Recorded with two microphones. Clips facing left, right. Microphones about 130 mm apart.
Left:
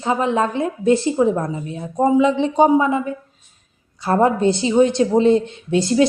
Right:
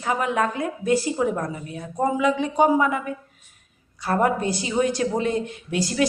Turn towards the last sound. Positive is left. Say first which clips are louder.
# left 7 dB
turn(degrees=25)  # may be behind; listen again after turning